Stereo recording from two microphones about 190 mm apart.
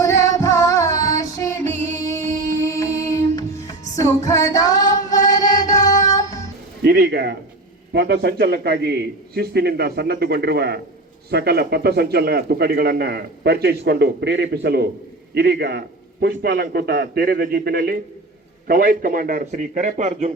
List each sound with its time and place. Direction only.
0.0 s music: 15° left (ahead or behind)
6.8 s a man's voice: 55° right (ahead or behind); by 20.3 s 35° right (ahead or behind)